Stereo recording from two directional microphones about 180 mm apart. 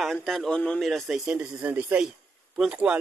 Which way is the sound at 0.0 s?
Centre (ahead or behind).